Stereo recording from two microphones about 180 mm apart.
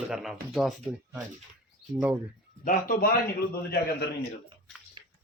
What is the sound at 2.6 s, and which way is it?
Speech, 50° left (ahead or behind).